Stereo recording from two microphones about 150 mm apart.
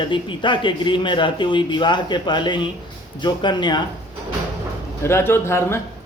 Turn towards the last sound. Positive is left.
turn(degrees=15)  # may be behind; listen again after turning